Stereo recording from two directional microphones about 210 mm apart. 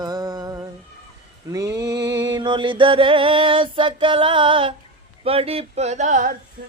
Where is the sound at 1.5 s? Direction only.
15° right (ahead or behind).